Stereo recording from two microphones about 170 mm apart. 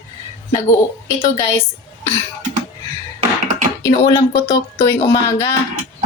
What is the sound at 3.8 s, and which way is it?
A woman's voice, 25° left (ahead or behind).